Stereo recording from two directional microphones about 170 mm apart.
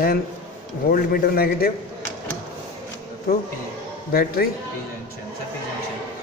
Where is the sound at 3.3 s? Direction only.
60° left (ahead or behind).